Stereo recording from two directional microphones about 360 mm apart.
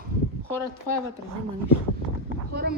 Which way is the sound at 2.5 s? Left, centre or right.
Right.